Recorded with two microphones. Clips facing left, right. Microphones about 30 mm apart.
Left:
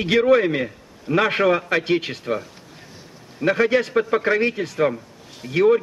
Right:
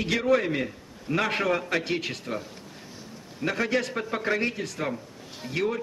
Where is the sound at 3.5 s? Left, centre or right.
Left.